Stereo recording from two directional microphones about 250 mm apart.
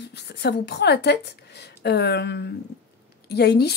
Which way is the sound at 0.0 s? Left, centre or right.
Left.